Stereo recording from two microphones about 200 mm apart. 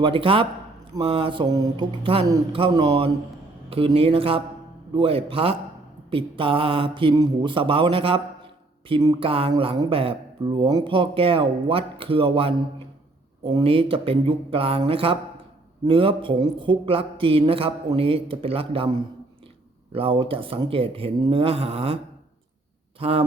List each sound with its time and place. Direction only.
0.0 s speech: 25° right (ahead or behind)
23.0 s speech: 30° right (ahead or behind)